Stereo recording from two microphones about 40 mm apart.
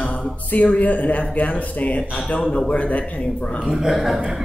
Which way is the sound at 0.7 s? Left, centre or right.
Left.